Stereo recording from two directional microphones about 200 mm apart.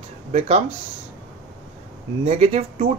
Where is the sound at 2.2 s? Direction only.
35° right (ahead or behind).